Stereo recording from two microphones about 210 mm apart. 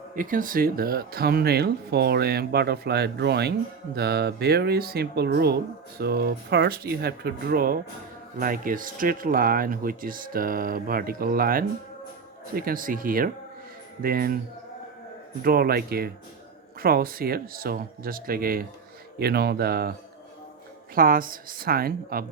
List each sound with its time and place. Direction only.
0.2 s speech: 40° right (ahead or behind)
15.4 s speech: 45° right (ahead or behind)